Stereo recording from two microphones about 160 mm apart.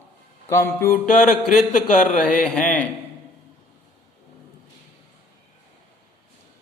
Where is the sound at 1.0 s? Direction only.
50° left (ahead or behind).